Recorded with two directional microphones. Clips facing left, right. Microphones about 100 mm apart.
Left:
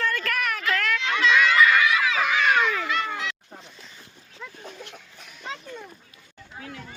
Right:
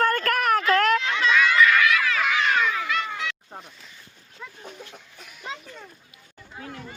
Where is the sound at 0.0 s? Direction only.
50° right (ahead or behind).